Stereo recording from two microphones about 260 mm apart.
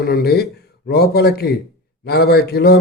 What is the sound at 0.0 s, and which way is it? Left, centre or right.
A man's voice, left.